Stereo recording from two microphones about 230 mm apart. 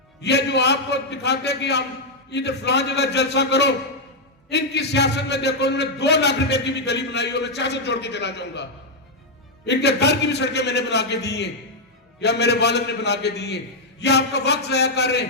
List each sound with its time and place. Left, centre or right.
0.2 s a man's voice: left
9.6 s a man's voice: left